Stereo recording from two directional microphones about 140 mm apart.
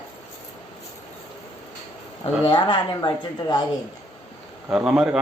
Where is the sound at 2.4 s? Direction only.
30° left (ahead or behind).